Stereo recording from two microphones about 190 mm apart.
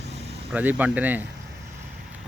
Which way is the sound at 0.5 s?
10° right (ahead or behind).